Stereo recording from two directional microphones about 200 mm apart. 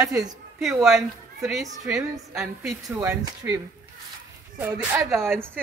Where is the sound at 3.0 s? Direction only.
15° right (ahead or behind).